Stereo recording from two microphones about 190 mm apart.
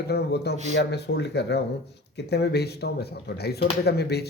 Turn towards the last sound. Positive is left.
turn(degrees=60)  # may be behind; listen again after turning